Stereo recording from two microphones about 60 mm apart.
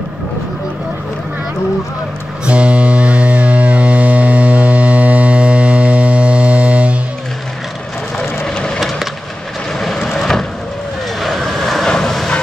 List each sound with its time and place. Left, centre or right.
2.4 s music: centre
8.5 s wood: centre
9.8 s vehicle: centre